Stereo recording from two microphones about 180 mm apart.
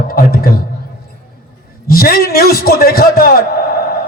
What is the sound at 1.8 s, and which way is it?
A man's voice, 55° left (ahead or behind).